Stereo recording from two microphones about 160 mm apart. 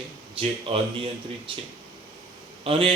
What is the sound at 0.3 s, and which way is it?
A man's voice, 35° right (ahead or behind).